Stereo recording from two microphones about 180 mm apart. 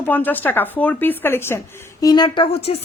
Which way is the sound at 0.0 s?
10° left (ahead or behind).